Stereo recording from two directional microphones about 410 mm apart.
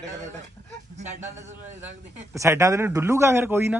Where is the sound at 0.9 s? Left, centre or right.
Centre.